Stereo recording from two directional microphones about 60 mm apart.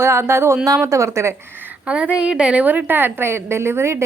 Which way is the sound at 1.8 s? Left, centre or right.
Centre.